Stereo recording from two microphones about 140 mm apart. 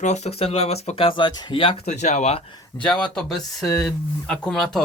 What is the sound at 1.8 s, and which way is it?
Speech, 55° left (ahead or behind).